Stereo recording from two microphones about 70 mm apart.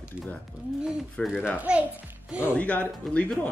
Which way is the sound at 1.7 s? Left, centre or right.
Centre.